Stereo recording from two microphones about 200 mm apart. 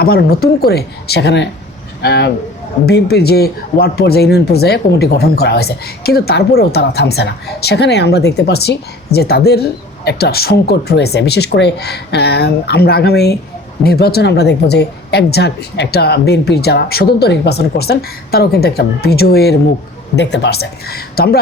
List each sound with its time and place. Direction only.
0.0 s speech: 50° left (ahead or behind)